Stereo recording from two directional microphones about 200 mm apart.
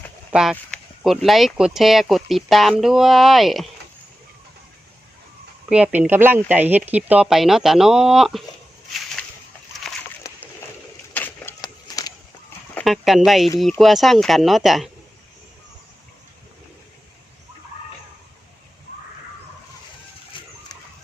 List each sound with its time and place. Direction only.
0.3 s speech: 5° right (ahead or behind)
5.6 s speech: 5° right (ahead or behind)
9.8 s splash: centre (ahead or behind)
11.1 s a sound: 10° left (ahead or behind)
12.7 s speech: centre (ahead or behind)
20.3 s a sound: 25° left (ahead or behind)